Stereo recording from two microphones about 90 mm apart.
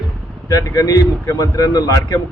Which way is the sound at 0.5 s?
40° left (ahead or behind).